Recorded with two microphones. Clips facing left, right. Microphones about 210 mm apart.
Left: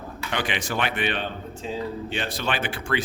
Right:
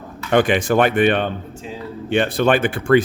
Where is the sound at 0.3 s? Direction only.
50° right (ahead or behind).